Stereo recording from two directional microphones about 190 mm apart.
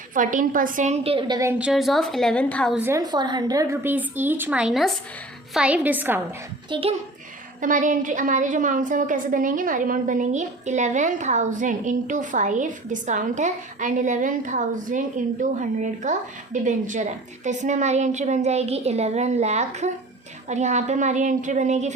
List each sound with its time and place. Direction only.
0.1 s a woman's voice: 45° right (ahead or behind)
1.4 s a woman's voice: 10° right (ahead or behind); by 2.7 s 5° left (ahead or behind)
2.7 s a woman's voice: 15° right (ahead or behind)
6.7 s a child's voice: 30° right (ahead or behind)
7.6 s a woman's voice: 45° right (ahead or behind)